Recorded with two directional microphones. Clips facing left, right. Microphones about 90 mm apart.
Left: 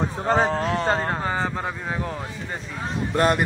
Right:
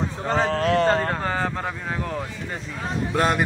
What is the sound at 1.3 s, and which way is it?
Speech, 15° left (ahead or behind).